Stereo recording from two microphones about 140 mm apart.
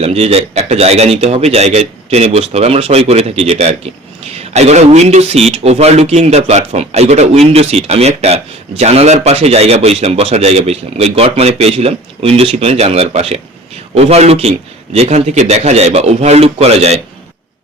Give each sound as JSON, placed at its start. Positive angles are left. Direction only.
{"t": 0.0, "sound": "a man's voice", "side_deg": -45}